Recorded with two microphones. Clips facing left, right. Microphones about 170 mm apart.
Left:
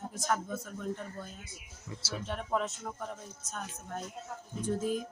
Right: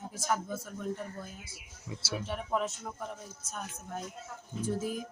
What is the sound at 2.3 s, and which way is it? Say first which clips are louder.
Speech: even; 5° right (ahead or behind).